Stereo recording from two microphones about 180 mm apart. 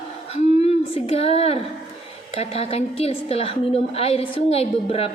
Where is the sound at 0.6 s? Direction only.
35° left (ahead or behind).